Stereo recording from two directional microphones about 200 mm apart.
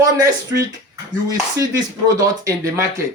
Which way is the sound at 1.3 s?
20° right (ahead or behind).